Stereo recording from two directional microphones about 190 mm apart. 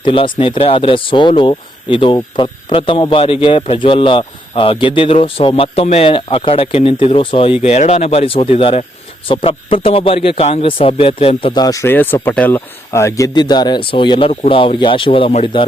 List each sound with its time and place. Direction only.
0.0 s speech: 25° left (ahead or behind)